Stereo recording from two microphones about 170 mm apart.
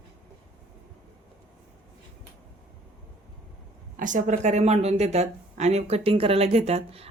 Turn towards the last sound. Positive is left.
turn(degrees=-35)  # may be behind; listen again after turning